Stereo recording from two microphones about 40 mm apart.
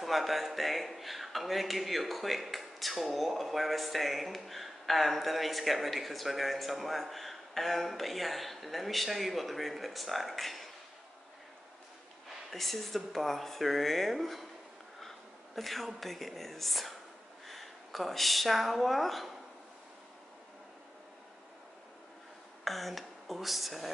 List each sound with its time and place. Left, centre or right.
0.0 s a man's voice: centre
12.4 s a man's voice: centre
15.0 s a sound: centre
16.0 s a man's voice: centre
22.7 s a man's voice: centre